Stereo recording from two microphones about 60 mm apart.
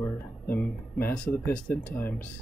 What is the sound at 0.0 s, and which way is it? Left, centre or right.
Music, left.